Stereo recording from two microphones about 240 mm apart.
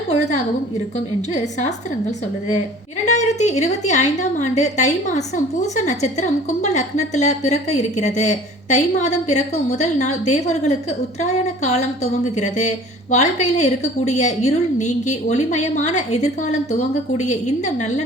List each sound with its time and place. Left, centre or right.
0.1 s a woman's voice: left